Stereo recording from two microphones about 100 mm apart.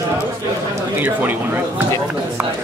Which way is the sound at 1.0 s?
20° right (ahead or behind).